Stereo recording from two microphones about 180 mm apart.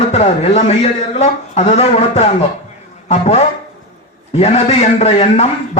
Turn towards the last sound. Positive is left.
turn(degrees=35)  # may be behind; listen again after turning